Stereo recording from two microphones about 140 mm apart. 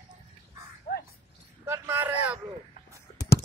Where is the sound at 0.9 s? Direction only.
90° left.